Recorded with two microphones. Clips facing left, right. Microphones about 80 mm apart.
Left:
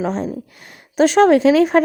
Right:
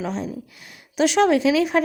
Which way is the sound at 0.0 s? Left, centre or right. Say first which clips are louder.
Left 6 dB; left.